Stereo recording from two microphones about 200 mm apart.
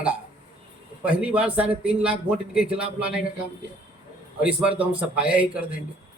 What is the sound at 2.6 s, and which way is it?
Speech, 30° right (ahead or behind).